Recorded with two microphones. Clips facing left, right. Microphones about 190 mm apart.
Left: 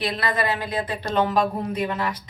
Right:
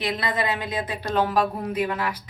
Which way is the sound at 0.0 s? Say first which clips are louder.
Left 1 dB; 20° right (ahead or behind).